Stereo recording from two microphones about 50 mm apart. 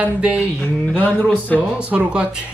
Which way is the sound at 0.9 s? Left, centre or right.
Left.